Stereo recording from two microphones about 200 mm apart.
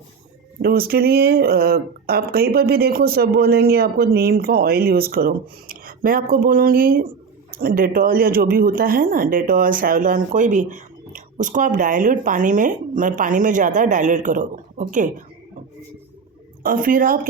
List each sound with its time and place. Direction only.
0.6 s speech: 50° right (ahead or behind)
16.6 s speech: 45° right (ahead or behind)